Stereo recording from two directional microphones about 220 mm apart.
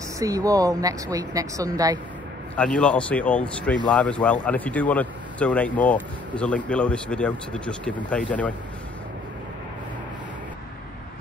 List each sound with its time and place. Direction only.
0.2 s speech: 15° right (ahead or behind)
2.5 s speech: 5° left (ahead or behind)